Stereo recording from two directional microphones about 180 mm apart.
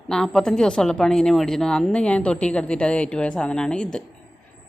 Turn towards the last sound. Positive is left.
turn(degrees=5)  # may be behind; listen again after turning